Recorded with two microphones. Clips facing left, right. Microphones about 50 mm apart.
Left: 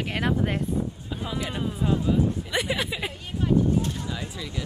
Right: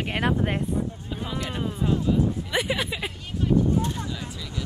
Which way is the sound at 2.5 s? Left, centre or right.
Centre.